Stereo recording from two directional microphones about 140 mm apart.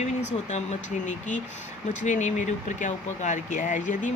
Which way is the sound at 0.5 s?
60° left (ahead or behind).